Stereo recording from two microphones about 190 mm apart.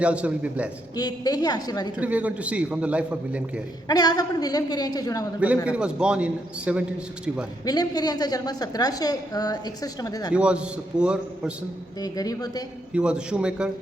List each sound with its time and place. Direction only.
0.0 s a man's voice: 5° right (ahead or behind)
0.9 s a woman's voice: 20° left (ahead or behind)
2.0 s a man's voice: 5° right (ahead or behind)
3.8 s a woman's voice: 20° left (ahead or behind)
5.6 s a man's voice: 5° right (ahead or behind)
7.6 s a woman's voice: 20° left (ahead or behind)
10.3 s a man's voice: 5° right (ahead or behind)
11.9 s a woman's voice: 20° left (ahead or behind)
12.9 s a man's voice: 5° right (ahead or behind)